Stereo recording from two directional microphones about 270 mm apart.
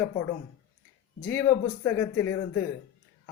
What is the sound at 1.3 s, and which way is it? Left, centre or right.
Speech, centre.